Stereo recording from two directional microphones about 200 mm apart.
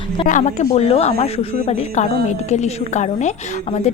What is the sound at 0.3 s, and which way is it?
A woman's voice, 40° left (ahead or behind).